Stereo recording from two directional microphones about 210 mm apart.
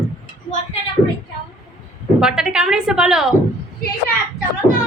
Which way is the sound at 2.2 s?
5° right (ahead or behind).